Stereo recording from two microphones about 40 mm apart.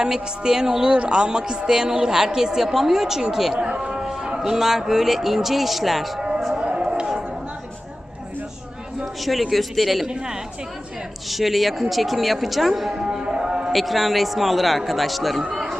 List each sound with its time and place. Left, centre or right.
0.0 s a woman's voice: centre
3.6 s music: right
4.4 s a woman's voice: centre
6.1 s a sound: right
9.2 s speech: centre
11.3 s speech: centre
13.1 s music: right
13.7 s speech: centre
15.5 s a sound: centre